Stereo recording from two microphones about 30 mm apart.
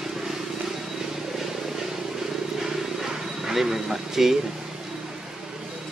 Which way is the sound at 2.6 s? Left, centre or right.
Centre.